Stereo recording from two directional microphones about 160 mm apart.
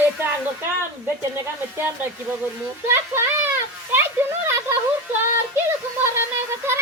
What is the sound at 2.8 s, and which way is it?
Speech, 15° right (ahead or behind).